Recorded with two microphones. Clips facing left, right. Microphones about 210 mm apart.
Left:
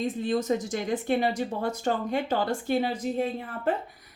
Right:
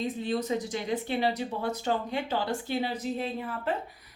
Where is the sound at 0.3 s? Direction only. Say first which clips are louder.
Left 4 dB; 45° left (ahead or behind).